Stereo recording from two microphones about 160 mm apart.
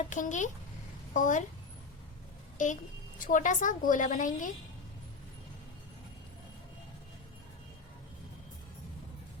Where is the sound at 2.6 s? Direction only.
55° left (ahead or behind).